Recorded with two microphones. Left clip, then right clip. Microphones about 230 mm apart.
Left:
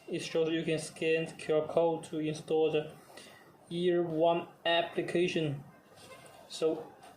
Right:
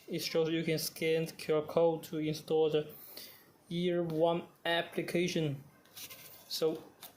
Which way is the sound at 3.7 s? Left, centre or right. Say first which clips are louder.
Left 3 dB; right.